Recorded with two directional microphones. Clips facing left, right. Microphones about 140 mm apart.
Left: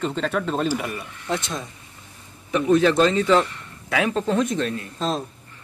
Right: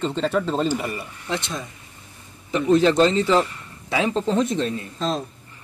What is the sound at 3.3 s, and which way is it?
Speech, centre (ahead or behind).